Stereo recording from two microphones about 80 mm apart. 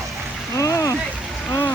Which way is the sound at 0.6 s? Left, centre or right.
Left.